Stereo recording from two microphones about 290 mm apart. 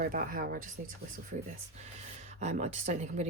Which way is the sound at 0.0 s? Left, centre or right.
Right.